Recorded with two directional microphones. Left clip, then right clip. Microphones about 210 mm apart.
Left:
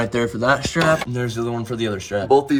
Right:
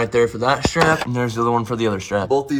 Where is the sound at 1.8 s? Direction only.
5° right (ahead or behind).